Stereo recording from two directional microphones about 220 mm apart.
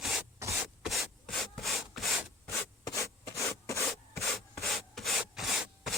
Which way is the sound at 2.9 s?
15° left (ahead or behind).